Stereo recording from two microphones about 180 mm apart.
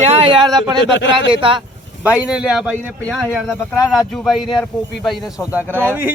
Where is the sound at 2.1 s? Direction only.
5° right (ahead or behind).